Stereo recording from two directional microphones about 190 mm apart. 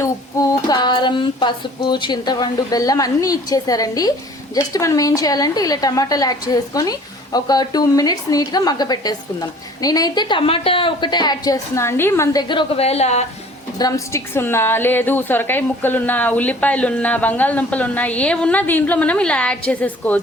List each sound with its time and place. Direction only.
0.7 s a woman's voice: 25° left (ahead or behind)
13.7 s a woman's voice: 20° left (ahead or behind)